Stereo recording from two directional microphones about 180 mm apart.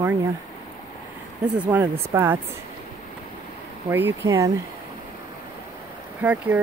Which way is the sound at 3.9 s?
10° right (ahead or behind).